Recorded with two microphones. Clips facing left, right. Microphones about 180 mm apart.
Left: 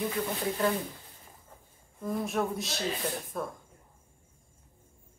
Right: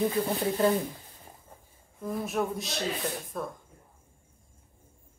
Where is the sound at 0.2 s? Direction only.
35° right (ahead or behind).